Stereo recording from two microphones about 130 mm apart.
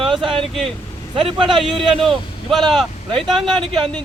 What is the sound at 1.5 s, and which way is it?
Speech, centre (ahead or behind).